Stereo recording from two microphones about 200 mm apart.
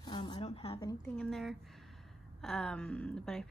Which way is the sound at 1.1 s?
5° left (ahead or behind).